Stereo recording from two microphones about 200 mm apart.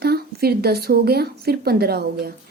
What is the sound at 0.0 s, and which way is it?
A woman's voice, 50° right (ahead or behind).